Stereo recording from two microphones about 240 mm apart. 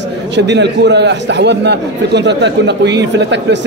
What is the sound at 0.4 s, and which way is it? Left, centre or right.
A man's voice, right.